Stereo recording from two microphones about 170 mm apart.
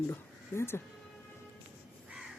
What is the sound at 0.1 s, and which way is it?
Speech, 15° left (ahead or behind).